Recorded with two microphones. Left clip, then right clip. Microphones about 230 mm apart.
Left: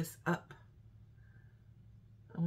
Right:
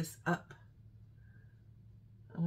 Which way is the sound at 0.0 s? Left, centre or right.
Centre.